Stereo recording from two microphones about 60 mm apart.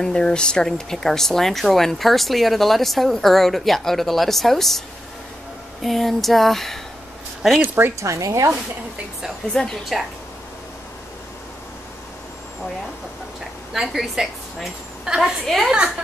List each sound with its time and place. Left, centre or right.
0.0 s speech: centre
7.6 s speech: right
8.0 s speech: right
9.5 s a woman's voice: centre
13.7 s a woman's voice: centre
15.4 s speech: centre